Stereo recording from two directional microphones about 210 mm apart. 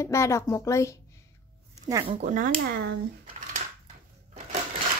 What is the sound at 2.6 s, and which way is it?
Speech, 50° right (ahead or behind).